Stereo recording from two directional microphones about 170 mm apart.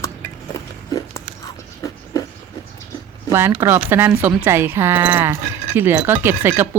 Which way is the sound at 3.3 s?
15° right (ahead or behind).